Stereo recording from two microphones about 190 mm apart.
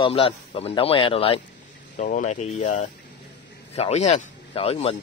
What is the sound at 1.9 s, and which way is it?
Speech, 45° left (ahead or behind).